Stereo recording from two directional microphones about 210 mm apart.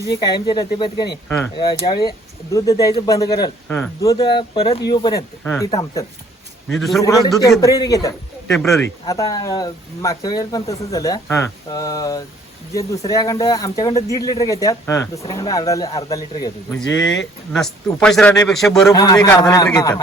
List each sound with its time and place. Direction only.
0.2 s speech: 20° left (ahead or behind)
6.7 s a man's voice: centre (ahead or behind)
7.0 s speech: 15° left (ahead or behind)
17.5 s a man's voice: 5° left (ahead or behind)
18.9 s speech: 15° left (ahead or behind)